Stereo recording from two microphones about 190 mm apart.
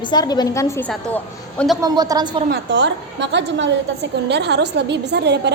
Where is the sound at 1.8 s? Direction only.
20° right (ahead or behind).